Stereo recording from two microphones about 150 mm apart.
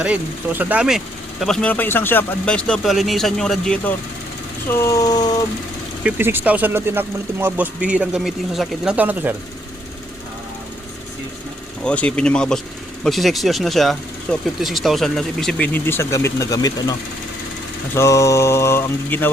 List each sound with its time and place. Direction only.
0.0 s speech: 10° right (ahead or behind)
4.7 s mantra: 20° left (ahead or behind)
6.0 s speech: 10° right (ahead or behind)
11.9 s speech: 10° left (ahead or behind); by 17.0 s 25° left (ahead or behind)
17.9 s mantra: 20° left (ahead or behind)